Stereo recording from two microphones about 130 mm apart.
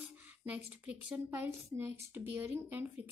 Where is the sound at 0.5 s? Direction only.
10° right (ahead or behind).